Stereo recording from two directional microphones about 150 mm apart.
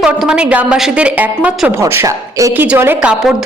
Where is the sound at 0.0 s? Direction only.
5° right (ahead or behind).